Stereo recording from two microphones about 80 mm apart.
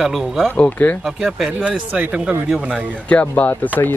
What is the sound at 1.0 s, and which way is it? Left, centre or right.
Speech, centre.